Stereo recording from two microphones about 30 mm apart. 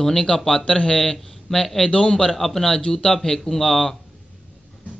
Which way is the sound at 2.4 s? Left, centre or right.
Centre.